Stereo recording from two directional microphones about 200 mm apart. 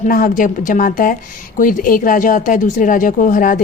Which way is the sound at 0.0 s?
40° left (ahead or behind).